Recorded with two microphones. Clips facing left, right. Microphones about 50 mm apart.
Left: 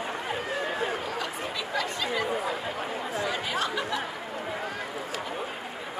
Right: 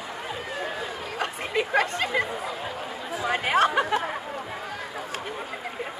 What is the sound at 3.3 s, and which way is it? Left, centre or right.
Chatter, right.